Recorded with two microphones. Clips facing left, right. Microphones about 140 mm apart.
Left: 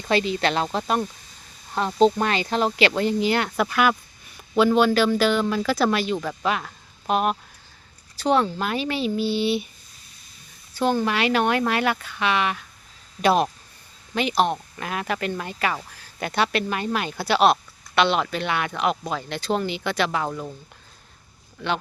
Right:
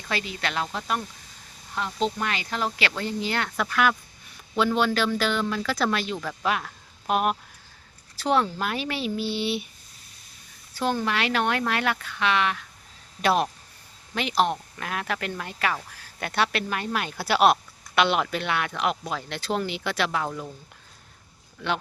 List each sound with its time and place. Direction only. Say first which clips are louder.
0.1 s speech: left 8 dB; 25° left (ahead or behind); by 9.6 s centre (ahead or behind)
10.8 s speech: left 4 dB; centre (ahead or behind)